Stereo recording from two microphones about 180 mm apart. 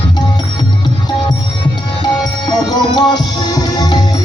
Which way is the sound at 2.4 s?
25° left (ahead or behind).